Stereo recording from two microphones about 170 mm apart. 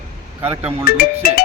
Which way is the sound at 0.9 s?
65° left (ahead or behind).